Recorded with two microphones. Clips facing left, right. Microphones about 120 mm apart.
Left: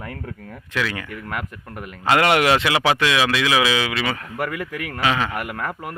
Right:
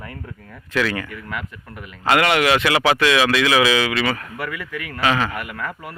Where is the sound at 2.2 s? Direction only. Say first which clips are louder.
Left 2 dB; 40° left (ahead or behind).